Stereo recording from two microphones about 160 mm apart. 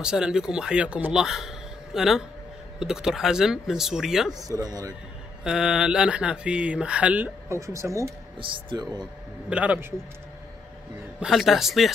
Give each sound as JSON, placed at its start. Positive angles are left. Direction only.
{"t": 0.0, "sound": "speech", "side_deg": -5}
{"t": 4.3, "sound": "speech", "side_deg": -20}
{"t": 5.4, "sound": "speech", "side_deg": -5}
{"t": 8.4, "sound": "speech", "side_deg": -30}
{"t": 9.5, "sound": "speech", "side_deg": -10}
{"t": 11.1, "sound": "speech", "side_deg": 0}